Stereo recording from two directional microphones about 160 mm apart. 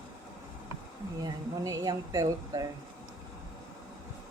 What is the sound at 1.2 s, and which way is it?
A woman's voice, 25° right (ahead or behind).